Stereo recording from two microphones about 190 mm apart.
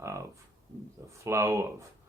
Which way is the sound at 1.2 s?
15° right (ahead or behind).